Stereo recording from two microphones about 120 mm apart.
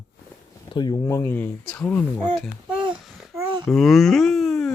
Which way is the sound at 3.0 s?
Centre (ahead or behind).